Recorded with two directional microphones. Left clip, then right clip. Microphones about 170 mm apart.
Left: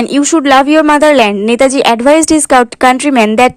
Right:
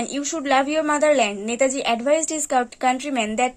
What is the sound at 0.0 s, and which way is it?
A woman's voice, 45° left (ahead or behind).